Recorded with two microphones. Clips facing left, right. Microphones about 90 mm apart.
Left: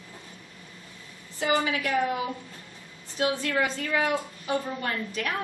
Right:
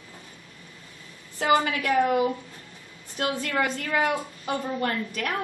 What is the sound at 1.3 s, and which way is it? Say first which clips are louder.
A woman's voice: right 3 dB; 55° right (ahead or behind).